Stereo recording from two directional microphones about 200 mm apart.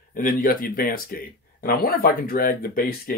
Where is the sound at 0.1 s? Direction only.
45° left (ahead or behind).